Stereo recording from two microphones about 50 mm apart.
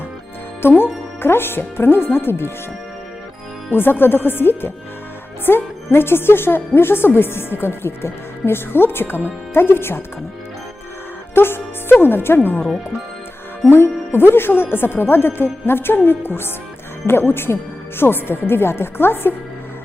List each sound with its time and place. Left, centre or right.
1.2 s speech: left
3.7 s speech: left
11.3 s speech: left
13.7 s speech: left